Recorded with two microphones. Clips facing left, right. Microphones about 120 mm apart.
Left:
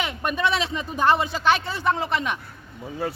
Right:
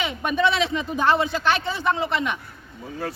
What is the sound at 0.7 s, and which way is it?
Speech, 10° left (ahead or behind).